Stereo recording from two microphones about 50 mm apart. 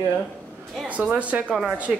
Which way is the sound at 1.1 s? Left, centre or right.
Right.